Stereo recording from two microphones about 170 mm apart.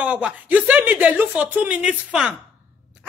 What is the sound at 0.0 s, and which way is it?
Speech, 5° right (ahead or behind).